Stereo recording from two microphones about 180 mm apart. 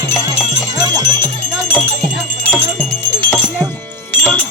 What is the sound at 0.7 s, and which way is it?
Music, 20° right (ahead or behind).